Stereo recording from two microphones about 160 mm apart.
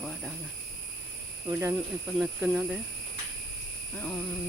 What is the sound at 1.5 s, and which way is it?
Speech, 20° right (ahead or behind).